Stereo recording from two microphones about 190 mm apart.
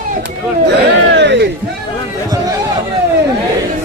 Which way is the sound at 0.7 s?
65° right (ahead or behind).